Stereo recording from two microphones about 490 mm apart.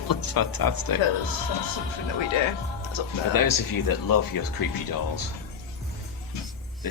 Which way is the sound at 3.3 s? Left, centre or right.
Left.